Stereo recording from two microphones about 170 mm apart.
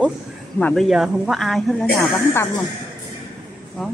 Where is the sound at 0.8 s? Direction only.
5° right (ahead or behind).